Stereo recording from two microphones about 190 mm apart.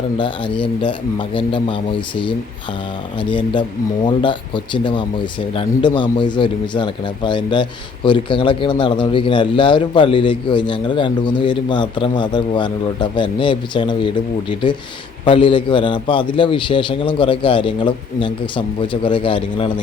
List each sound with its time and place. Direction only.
0.2 s speech: 25° left (ahead or behind)